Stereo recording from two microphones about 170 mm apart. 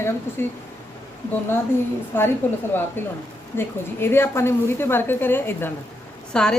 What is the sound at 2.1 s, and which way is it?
A woman's voice, 10° left (ahead or behind).